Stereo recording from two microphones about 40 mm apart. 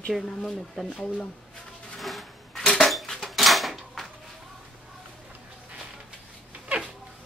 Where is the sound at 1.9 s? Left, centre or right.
Centre.